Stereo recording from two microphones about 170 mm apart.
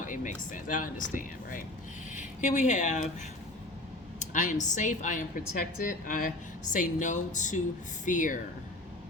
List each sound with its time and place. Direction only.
0.0 s speech: 50° left (ahead or behind)
4.2 s speech: 45° left (ahead or behind)